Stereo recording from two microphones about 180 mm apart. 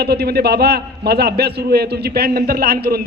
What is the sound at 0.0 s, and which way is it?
A man's voice, 65° right (ahead or behind).